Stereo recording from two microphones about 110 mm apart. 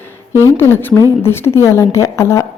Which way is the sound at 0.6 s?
20° left (ahead or behind).